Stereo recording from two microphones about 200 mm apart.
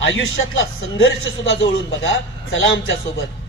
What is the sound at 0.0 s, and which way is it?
Speech, 75° left (ahead or behind).